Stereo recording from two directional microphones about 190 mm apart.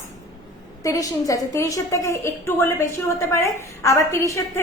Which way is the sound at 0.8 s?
20° left (ahead or behind).